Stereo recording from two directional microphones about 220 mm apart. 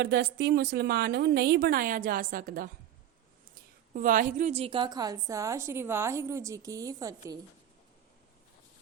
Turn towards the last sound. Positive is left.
turn(degrees=-15)  # may be behind; listen again after turning